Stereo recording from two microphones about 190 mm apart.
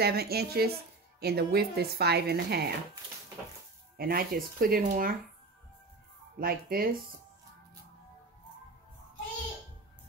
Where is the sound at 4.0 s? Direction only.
50° right (ahead or behind).